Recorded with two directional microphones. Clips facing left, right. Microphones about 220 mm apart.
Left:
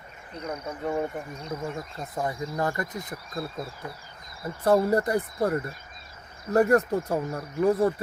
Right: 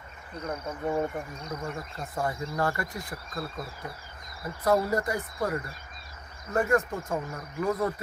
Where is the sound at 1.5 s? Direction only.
20° left (ahead or behind).